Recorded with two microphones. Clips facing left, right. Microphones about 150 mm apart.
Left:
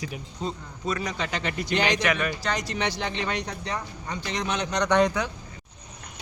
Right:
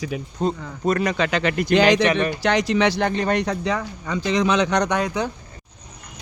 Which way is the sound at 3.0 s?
45° right (ahead or behind).